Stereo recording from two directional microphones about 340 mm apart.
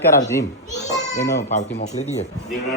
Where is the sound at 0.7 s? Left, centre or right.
Left.